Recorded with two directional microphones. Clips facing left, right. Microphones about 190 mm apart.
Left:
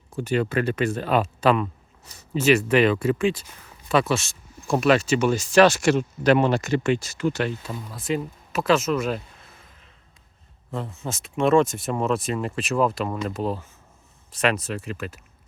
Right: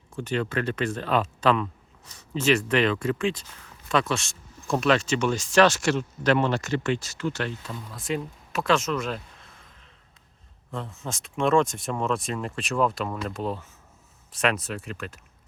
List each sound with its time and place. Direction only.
0.1 s speech: 10° left (ahead or behind)
10.7 s speech: 5° left (ahead or behind)